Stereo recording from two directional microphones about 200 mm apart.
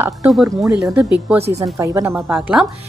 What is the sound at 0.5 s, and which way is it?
Speech, centre (ahead or behind).